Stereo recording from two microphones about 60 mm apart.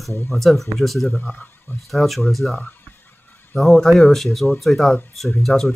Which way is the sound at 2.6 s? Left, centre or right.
Left.